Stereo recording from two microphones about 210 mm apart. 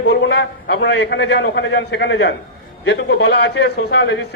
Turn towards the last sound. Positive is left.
turn(degrees=55)  # may be behind; listen again after turning